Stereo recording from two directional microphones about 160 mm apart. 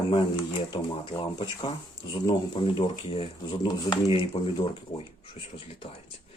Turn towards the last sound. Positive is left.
turn(degrees=35)  # may be behind; listen again after turning